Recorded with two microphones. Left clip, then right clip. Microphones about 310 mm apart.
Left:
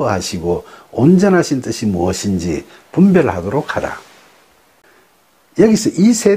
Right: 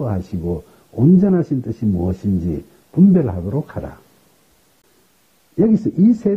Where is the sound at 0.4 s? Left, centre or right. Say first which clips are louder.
Left 7 dB; left.